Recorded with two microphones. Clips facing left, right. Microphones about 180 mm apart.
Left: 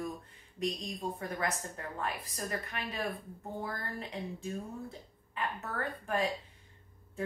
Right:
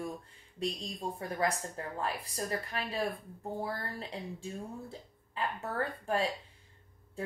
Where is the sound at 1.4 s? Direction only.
30° right (ahead or behind).